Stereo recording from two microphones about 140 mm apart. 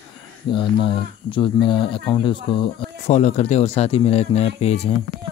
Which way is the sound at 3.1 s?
55° left (ahead or behind).